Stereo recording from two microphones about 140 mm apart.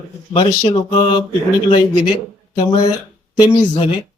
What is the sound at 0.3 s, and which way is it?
Speech, 30° left (ahead or behind).